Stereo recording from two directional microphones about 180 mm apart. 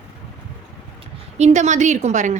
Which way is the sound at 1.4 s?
40° right (ahead or behind).